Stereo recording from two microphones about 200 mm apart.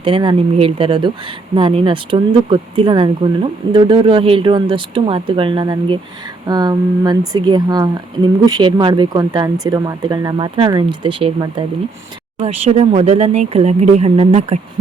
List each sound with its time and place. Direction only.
0.0 s speech: 25° right (ahead or behind)